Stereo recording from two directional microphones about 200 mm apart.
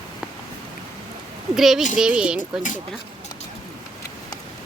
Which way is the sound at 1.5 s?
Centre (ahead or behind).